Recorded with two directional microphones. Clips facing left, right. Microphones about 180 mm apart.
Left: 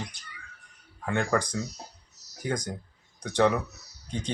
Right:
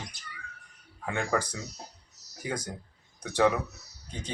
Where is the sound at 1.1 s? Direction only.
5° right (ahead or behind).